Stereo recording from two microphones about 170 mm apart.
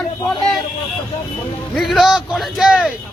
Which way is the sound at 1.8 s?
Centre (ahead or behind).